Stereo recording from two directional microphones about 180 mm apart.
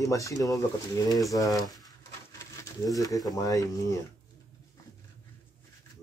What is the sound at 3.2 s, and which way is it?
Speech, 20° left (ahead or behind).